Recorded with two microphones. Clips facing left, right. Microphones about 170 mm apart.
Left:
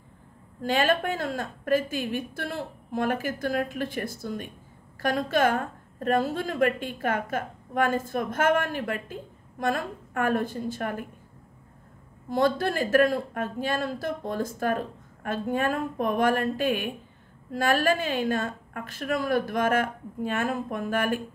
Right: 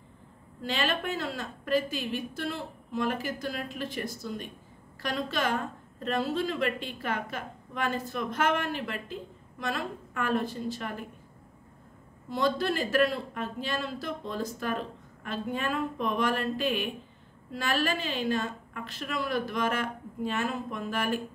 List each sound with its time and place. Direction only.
0.6 s a woman's voice: 50° left (ahead or behind)
12.3 s a woman's voice: 50° left (ahead or behind)